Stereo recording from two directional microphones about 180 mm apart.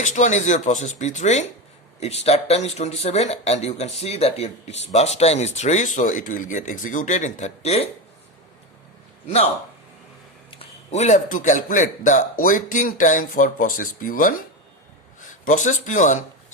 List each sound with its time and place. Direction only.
0.0 s a man's voice: 45° left (ahead or behind)
9.2 s speech: 35° left (ahead or behind)
10.6 s a man's voice: 40° left (ahead or behind)